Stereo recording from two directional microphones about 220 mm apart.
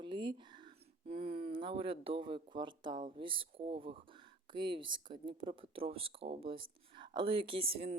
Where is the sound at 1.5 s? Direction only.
25° right (ahead or behind).